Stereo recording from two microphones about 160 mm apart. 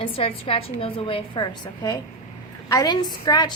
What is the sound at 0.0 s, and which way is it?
A woman's voice, 35° left (ahead or behind).